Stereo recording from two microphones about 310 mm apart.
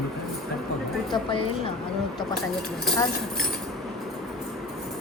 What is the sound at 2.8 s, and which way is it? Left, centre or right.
Speech, centre.